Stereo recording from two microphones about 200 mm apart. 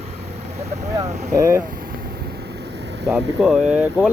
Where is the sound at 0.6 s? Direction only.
30° right (ahead or behind).